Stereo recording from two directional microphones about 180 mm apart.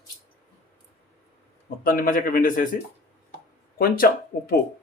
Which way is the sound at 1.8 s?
50° left (ahead or behind).